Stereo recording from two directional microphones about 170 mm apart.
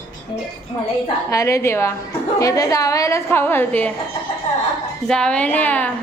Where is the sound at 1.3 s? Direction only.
20° left (ahead or behind).